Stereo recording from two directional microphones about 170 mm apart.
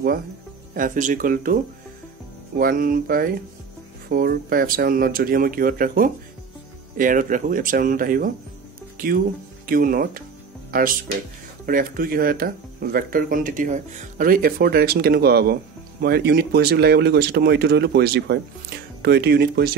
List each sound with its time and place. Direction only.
0.7 s speech: 50° right (ahead or behind)
8.9 s music: 55° right (ahead or behind)
9.7 s speech: 55° right (ahead or behind)